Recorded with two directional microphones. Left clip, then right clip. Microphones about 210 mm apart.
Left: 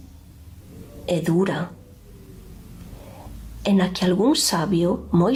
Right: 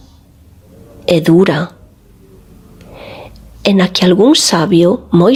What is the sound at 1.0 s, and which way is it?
Speech, 35° right (ahead or behind).